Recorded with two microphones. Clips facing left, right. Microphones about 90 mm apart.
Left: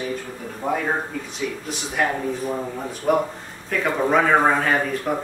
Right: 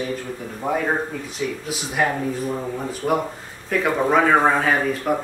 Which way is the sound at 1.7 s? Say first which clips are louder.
Right 1 dB; centre (ahead or behind).